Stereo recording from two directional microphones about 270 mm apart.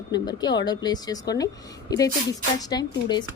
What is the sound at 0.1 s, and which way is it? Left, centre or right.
A woman's voice, centre.